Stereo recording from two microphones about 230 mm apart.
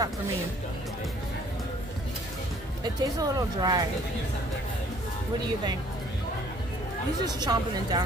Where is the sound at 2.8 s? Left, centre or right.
Centre.